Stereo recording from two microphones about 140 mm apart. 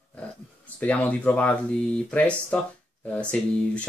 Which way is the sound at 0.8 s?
10° left (ahead or behind).